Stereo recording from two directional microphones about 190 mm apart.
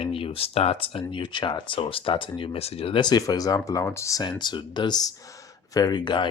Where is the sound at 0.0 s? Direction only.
30° left (ahead or behind).